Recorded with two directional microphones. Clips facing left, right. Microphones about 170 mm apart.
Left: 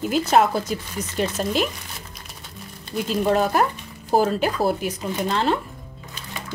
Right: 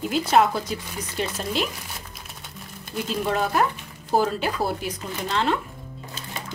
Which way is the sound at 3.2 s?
45° left (ahead or behind).